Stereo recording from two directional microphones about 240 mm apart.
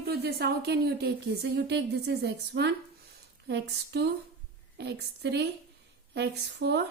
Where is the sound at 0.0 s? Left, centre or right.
Right.